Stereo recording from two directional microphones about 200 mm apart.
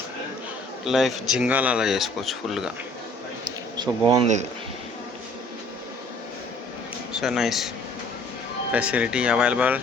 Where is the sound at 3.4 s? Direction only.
20° right (ahead or behind).